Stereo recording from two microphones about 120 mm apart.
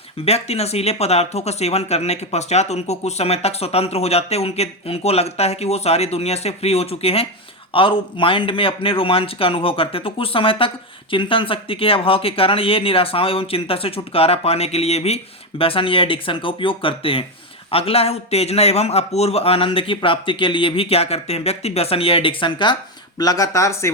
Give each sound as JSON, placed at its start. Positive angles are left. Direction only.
{"t": 0.3, "sound": "a man's voice", "side_deg": 60}